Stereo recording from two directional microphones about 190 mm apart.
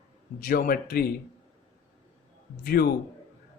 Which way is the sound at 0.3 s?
50° left (ahead or behind).